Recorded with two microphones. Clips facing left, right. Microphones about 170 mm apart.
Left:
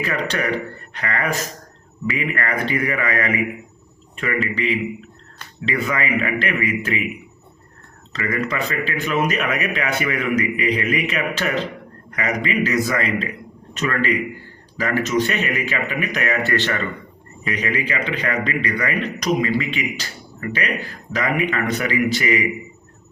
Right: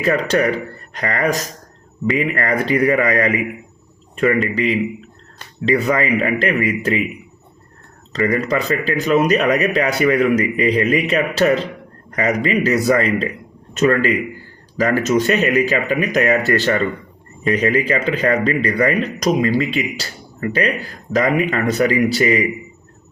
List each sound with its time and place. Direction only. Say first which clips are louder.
0.0 s a man's voice: right 7 dB; 40° right (ahead or behind)
8.1 s a man's voice: right 6 dB; 35° right (ahead or behind)